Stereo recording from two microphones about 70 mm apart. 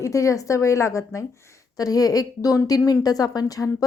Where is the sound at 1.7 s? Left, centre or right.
Left.